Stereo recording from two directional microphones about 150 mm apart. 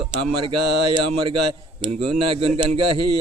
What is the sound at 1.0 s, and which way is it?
Speech, 35° right (ahead or behind).